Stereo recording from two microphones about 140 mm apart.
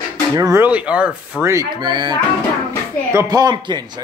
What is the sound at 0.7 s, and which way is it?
Speech, 10° right (ahead or behind).